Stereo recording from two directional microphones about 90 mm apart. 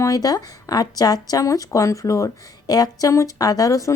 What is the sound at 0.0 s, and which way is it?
A woman's voice, 45° left (ahead or behind).